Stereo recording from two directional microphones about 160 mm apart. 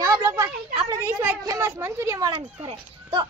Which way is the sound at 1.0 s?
15° right (ahead or behind).